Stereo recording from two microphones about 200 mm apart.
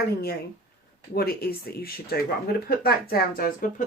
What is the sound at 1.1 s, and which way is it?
Speech, 50° left (ahead or behind).